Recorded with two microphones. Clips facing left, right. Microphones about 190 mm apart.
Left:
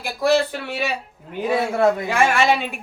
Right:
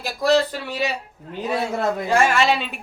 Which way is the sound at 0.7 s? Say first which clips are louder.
Right 1 dB; 55° left (ahead or behind).